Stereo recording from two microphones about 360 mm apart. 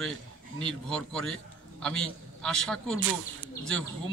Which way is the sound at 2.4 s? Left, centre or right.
Centre.